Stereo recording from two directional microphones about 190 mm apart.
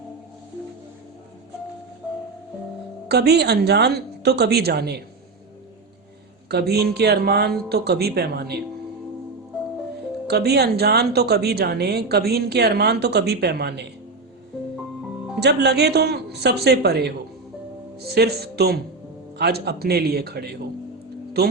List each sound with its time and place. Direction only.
3.1 s speech: 60° right (ahead or behind)
6.5 s speech: 60° right (ahead or behind)
10.2 s speech: 60° right (ahead or behind)
15.4 s speech: 60° right (ahead or behind)
18.1 s speech: 60° right (ahead or behind)